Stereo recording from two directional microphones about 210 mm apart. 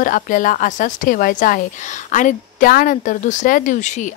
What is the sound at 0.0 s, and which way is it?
Speech, 40° left (ahead or behind).